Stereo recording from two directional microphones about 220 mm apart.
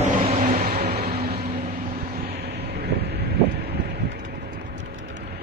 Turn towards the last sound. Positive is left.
turn(degrees=-55)  # may be behind; listen again after turning